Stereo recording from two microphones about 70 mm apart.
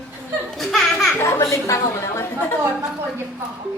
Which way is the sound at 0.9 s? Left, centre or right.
Left.